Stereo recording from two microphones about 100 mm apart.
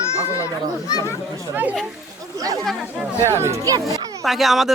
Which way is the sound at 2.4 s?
35° right (ahead or behind).